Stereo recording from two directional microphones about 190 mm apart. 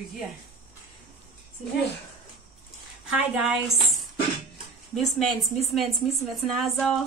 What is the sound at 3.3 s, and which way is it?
Speech, 5° right (ahead or behind).